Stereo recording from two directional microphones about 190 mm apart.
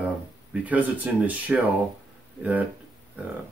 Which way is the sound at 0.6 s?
10° right (ahead or behind).